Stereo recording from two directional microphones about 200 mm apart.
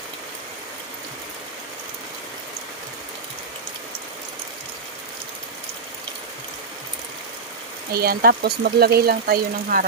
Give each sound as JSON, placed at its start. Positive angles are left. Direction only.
{"t": 7.9, "sound": "speech", "side_deg": -50}